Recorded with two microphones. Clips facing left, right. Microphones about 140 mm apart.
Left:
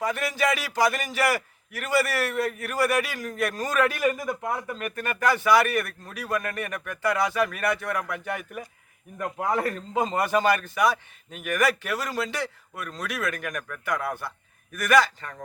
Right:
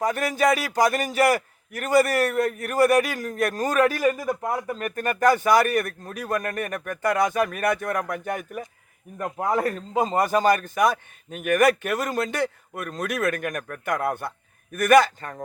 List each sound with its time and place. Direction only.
0.0 s a man's voice: 45° right (ahead or behind)
9.1 s a man's voice: 20° right (ahead or behind)
9.9 s a man's voice: 40° right (ahead or behind)